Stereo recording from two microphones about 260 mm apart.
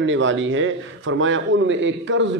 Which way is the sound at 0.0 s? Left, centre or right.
Right.